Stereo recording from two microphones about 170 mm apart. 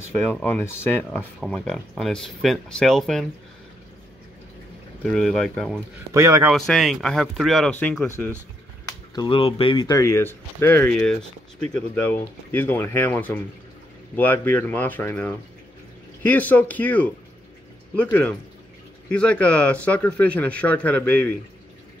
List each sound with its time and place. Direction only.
0.1 s speech: 5° left (ahead or behind)
5.0 s speech: 5° left (ahead or behind)
6.1 s speech: 15° right (ahead or behind)
6.5 s speech: centre (ahead or behind)
8.8 s speech: 25° left (ahead or behind); by 17.1 s 10° left (ahead or behind)
19.0 s speech: 5° left (ahead or behind)